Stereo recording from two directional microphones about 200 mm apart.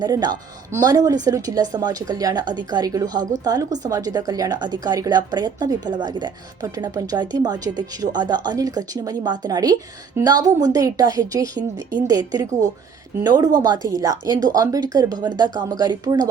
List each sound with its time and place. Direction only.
0.0 s a woman's voice: 20° right (ahead or behind)